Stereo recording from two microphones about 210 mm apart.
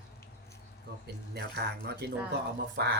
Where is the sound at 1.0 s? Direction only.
50° right (ahead or behind).